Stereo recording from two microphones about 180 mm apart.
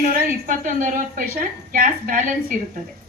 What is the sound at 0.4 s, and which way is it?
Speech, 50° right (ahead or behind).